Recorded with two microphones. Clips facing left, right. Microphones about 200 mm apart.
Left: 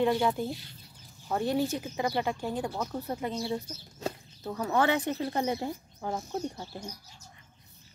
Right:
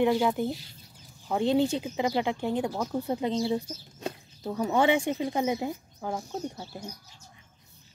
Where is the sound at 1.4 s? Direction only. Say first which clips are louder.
Right 5 dB; 25° right (ahead or behind); by 6.6 s centre (ahead or behind).